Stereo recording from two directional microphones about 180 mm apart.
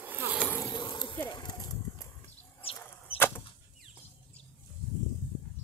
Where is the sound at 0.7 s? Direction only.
25° left (ahead or behind).